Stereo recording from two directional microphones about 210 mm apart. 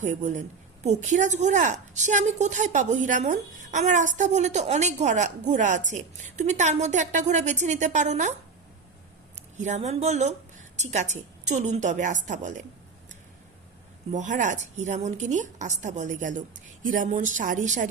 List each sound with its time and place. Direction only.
0.0 s a woman's voice: 35° right (ahead or behind)
9.6 s a woman's voice: 35° right (ahead or behind)
14.1 s a woman's voice: 35° right (ahead or behind)